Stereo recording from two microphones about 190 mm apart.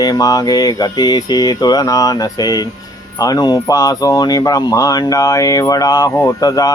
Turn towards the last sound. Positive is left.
turn(degrees=20)  # may be behind; listen again after turning